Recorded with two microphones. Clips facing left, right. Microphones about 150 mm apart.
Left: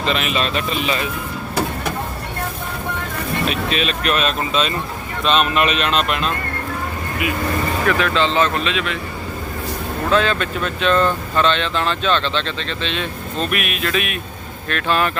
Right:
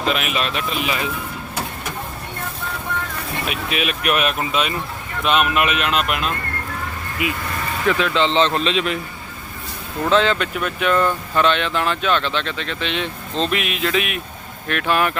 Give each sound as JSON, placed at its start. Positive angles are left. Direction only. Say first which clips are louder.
{"t": 0.0, "sound": "speech", "louder": "left 1 dB", "side_deg": -5}
{"t": 3.4, "sound": "speech", "louder": "left 2 dB", "side_deg": -10}
{"t": 7.9, "sound": "speech", "louder": "right 1 dB", "side_deg": -20}
{"t": 10.1, "sound": "speech", "louder": "right 1 dB", "side_deg": -20}